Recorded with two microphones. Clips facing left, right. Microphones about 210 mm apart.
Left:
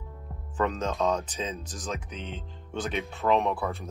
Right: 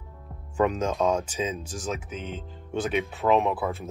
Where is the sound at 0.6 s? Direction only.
10° right (ahead or behind).